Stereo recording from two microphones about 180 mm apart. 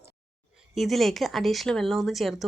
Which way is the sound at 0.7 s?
Centre (ahead or behind).